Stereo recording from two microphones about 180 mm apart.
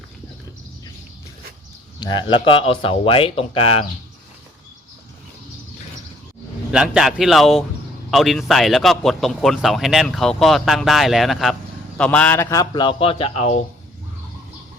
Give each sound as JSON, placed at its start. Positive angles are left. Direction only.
{"t": 2.0, "sound": "speech", "side_deg": 25}
{"t": 6.7, "sound": "a man's voice", "side_deg": -5}